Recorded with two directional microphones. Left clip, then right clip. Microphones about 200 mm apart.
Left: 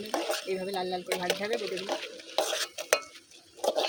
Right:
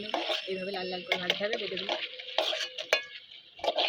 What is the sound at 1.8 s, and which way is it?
Stir, 15° left (ahead or behind).